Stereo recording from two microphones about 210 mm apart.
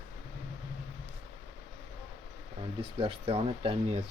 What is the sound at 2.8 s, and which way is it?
Speech, 25° right (ahead or behind).